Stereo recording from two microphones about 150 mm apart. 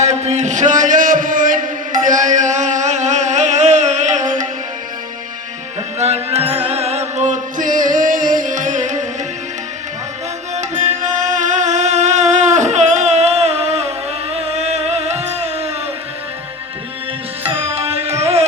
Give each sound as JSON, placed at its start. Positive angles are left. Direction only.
{"t": 0.0, "sound": "music", "side_deg": -50}
{"t": 6.0, "sound": "music", "side_deg": -45}
{"t": 10.5, "sound": "music", "side_deg": -50}
{"t": 17.7, "sound": "music", "side_deg": -45}
{"t": 18.2, "sound": "carnatic music", "side_deg": -45}